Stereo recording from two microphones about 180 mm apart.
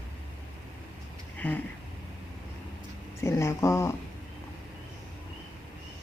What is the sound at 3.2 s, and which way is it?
Speech, 15° left (ahead or behind).